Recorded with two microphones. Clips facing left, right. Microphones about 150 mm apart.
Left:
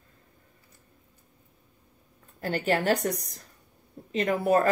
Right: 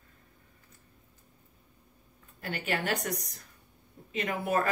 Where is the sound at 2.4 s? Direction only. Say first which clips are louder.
Left 8 dB; 40° left (ahead or behind).